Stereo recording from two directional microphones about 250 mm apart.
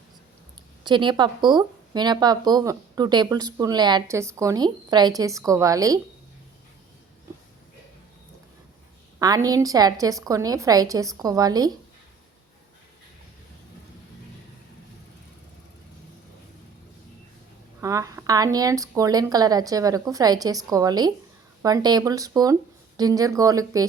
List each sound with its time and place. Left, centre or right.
0.9 s speech: centre
9.1 s speech: centre
17.7 s speech: centre